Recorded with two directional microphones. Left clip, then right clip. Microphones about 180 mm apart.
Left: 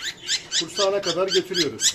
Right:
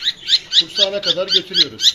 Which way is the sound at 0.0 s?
15° left (ahead or behind).